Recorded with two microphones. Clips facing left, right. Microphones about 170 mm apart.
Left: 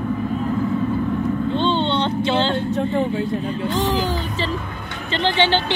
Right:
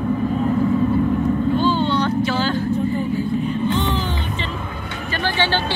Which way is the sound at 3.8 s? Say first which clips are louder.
Left 2 dB; 90° left.